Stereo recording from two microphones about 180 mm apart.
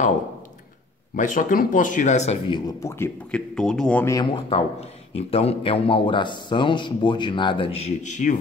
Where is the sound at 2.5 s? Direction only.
20° left (ahead or behind).